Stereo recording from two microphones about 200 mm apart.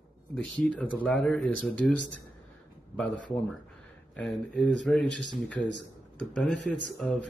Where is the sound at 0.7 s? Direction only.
5° left (ahead or behind).